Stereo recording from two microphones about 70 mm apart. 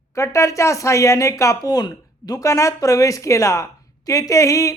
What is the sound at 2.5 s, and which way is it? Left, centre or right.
A woman's voice, left.